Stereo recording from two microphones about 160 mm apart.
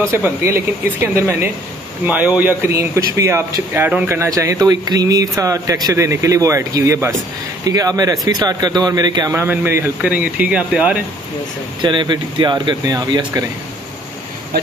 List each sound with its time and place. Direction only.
0.5 s speech: 15° right (ahead or behind)
11.8 s speech: 30° right (ahead or behind)